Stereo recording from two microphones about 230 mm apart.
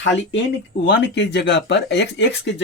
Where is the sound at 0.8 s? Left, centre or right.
Left.